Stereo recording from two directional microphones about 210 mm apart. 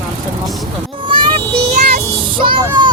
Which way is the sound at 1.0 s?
25° right (ahead or behind).